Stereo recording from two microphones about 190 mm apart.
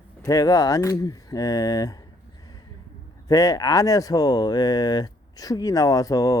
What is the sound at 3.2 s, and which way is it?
A man's voice, 20° left (ahead or behind).